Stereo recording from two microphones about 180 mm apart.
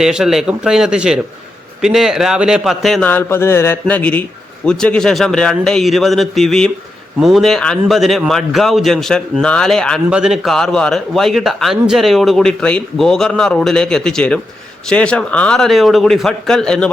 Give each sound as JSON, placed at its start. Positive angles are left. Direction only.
{"t": 0.0, "sound": "a man's voice", "side_deg": -5}